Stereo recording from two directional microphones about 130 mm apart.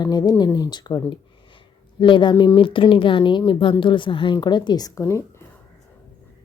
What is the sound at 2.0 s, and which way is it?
A woman's voice, 40° left (ahead or behind).